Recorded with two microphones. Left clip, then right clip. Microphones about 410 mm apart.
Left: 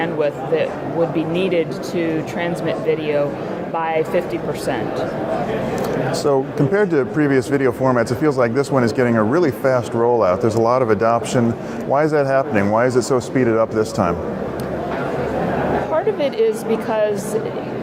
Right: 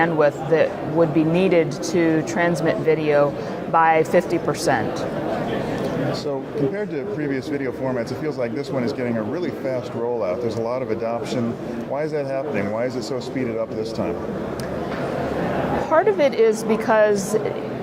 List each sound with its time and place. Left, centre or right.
0.0 s a man's voice: right
6.7 s speech: left
15.9 s speech: right